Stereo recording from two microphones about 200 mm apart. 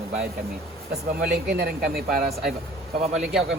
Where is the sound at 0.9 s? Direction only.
55° right (ahead or behind).